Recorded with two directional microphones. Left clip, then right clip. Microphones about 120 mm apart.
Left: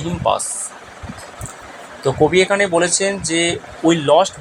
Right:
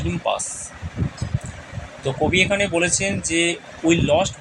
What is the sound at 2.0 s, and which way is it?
Speech, 15° left (ahead or behind).